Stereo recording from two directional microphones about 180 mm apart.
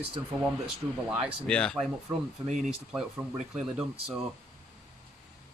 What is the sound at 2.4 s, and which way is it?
Speech, 40° right (ahead or behind).